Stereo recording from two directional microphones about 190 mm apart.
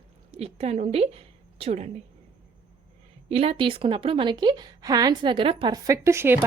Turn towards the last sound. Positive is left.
turn(degrees=-15)  # may be behind; listen again after turning